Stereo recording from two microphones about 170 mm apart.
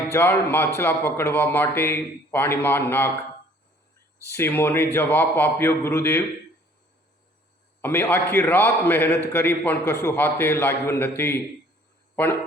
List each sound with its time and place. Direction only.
0.1 s a man's voice: 15° left (ahead or behind)
4.3 s a man's voice: 15° left (ahead or behind)
7.8 s a man's voice: 10° left (ahead or behind)